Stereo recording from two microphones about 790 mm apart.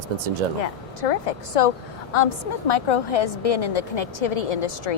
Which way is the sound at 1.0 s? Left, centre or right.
Left.